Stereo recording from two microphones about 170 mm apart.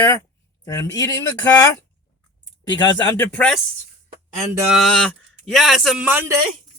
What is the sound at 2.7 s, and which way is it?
Speech, 25° left (ahead or behind).